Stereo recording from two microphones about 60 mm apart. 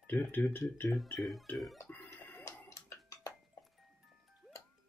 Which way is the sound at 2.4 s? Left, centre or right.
Left.